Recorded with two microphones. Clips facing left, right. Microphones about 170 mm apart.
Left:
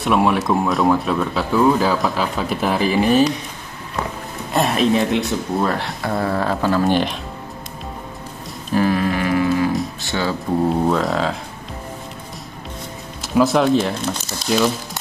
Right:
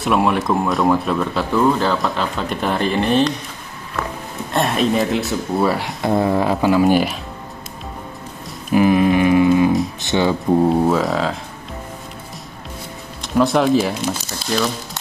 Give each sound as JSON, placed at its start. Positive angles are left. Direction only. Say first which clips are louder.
{"t": 0.0, "sound": "speech", "louder": "even", "side_deg": 0}
{"t": 4.5, "sound": "speech", "louder": "left 1 dB", "side_deg": 0}
{"t": 5.9, "sound": "speech", "louder": "right 4 dB", "side_deg": -20}
{"t": 8.7, "sound": "music", "louder": "right 5 dB", "side_deg": -15}
{"t": 10.0, "sound": "speech", "louder": "right 8 dB", "side_deg": -20}
{"t": 13.2, "sound": "speech", "louder": "even", "side_deg": 0}